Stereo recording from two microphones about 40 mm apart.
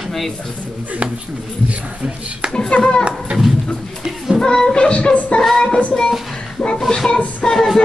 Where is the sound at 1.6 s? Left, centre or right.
Right.